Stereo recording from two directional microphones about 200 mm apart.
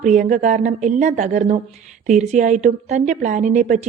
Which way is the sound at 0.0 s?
40° right (ahead or behind).